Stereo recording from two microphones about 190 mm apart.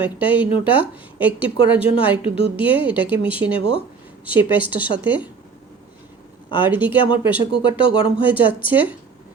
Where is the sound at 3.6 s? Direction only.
30° left (ahead or behind).